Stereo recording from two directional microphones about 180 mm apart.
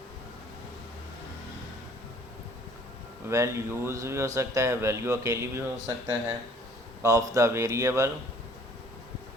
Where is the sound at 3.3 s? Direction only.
15° right (ahead or behind).